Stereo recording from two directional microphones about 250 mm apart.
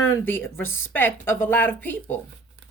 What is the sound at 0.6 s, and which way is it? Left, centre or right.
Speech, left.